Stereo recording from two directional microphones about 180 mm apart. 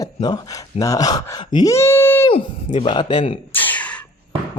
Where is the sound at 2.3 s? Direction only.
30° left (ahead or behind).